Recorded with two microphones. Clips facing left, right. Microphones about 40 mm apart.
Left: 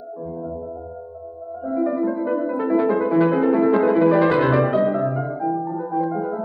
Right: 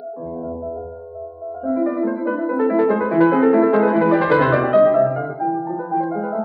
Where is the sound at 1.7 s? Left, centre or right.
Centre.